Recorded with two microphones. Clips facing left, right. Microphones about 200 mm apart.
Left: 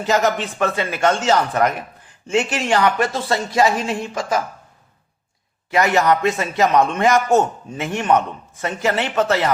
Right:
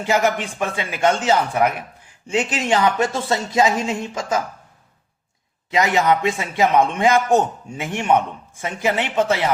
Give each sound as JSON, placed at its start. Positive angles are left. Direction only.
{"t": 0.0, "sound": "speech", "side_deg": -10}
{"t": 5.7, "sound": "speech", "side_deg": -15}